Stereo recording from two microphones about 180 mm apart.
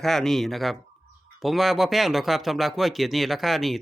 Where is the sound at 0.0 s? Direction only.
Centre (ahead or behind).